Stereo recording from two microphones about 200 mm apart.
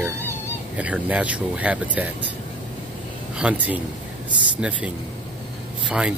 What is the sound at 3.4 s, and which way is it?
Speech, 5° right (ahead or behind).